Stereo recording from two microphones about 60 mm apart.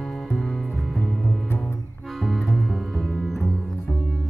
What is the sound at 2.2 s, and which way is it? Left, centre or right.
Music, centre.